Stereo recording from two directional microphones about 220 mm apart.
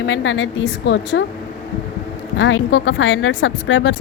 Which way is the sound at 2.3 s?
55° left (ahead or behind).